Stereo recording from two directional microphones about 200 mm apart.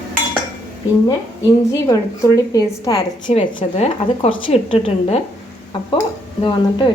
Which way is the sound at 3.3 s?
30° left (ahead or behind).